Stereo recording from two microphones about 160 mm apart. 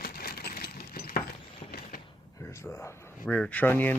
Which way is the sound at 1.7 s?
70° left (ahead or behind).